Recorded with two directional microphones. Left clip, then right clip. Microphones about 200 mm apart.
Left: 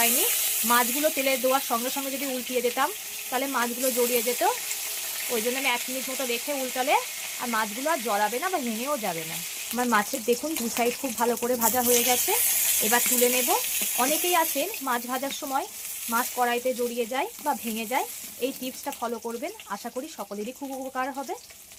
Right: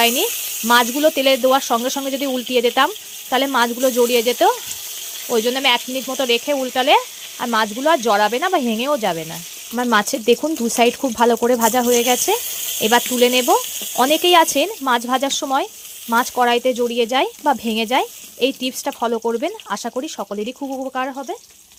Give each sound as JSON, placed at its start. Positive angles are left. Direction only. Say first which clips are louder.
{"t": 0.7, "sound": "speech", "louder": "right 10 dB", "side_deg": -50}